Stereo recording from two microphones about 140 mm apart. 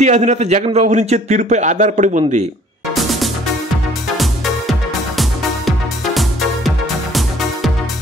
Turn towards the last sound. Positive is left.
turn(degrees=0)  # may be behind; listen again after turning